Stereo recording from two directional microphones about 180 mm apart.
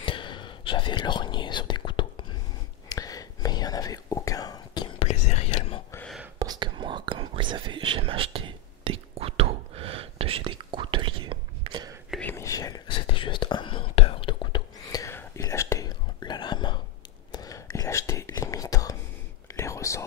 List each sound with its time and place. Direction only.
0.0 s whispering: 25° left (ahead or behind)
4.9 s whispering: 35° left (ahead or behind)
6.4 s whispering: 25° right (ahead or behind)
12.1 s whispering: 10° left (ahead or behind)